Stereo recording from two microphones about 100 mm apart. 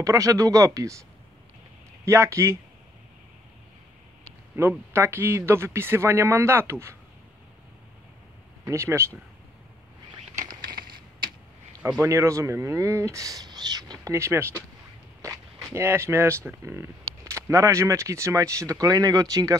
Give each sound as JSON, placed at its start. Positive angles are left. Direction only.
{"t": 0.0, "sound": "speech", "side_deg": -35}
{"t": 2.0, "sound": "speech", "side_deg": -30}
{"t": 4.6, "sound": "speech", "side_deg": -25}
{"t": 8.6, "sound": "speech", "side_deg": -25}
{"t": 12.0, "sound": "speech", "side_deg": -30}